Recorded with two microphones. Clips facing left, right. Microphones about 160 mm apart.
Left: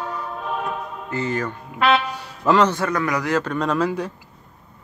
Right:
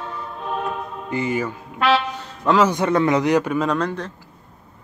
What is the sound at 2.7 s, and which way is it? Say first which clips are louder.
Speech: right 5 dB; 25° right (ahead or behind).